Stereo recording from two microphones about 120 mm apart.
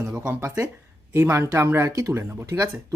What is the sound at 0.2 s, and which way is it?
Speech, 15° right (ahead or behind).